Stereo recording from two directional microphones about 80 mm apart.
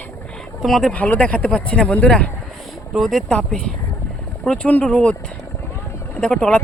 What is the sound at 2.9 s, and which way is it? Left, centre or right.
Speech, centre.